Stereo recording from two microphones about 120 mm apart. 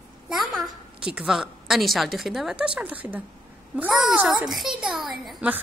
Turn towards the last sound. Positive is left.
turn(degrees=0)  # may be behind; listen again after turning